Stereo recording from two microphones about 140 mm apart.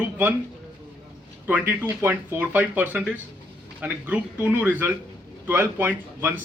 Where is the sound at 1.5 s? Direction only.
15° right (ahead or behind).